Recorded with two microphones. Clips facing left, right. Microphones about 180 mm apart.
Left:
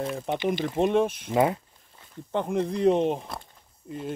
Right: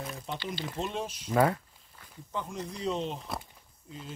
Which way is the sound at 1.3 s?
20° left (ahead or behind).